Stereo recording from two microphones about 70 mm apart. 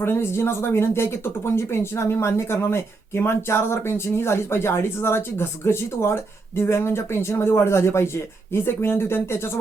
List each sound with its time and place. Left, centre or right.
0.0 s speech: left